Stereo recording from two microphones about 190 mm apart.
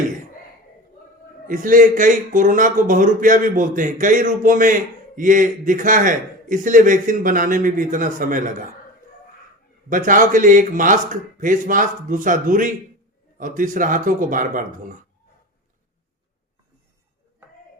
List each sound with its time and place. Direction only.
1.5 s speech: 45° right (ahead or behind)
9.9 s speech: 45° right (ahead or behind)